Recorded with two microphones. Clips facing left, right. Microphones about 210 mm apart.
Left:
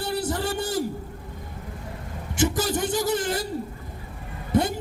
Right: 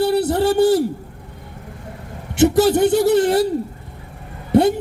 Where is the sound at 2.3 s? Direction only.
65° right (ahead or behind).